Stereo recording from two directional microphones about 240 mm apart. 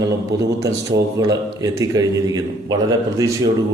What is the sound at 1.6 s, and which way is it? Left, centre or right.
A man's voice, centre.